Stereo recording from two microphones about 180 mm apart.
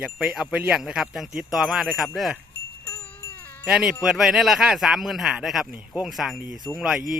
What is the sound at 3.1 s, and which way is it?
Wind chime, 10° left (ahead or behind).